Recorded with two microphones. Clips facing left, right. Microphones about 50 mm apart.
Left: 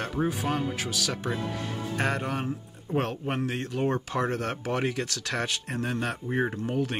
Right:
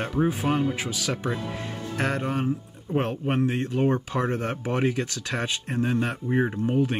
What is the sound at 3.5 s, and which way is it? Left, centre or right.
Speech, right.